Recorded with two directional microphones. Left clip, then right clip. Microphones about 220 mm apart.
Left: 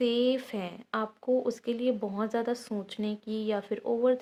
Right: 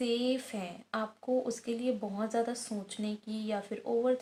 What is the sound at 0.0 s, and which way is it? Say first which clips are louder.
A woman's voice: left 5 dB; 40° left (ahead or behind).